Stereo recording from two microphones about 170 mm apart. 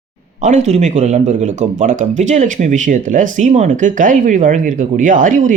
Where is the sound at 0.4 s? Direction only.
45° right (ahead or behind).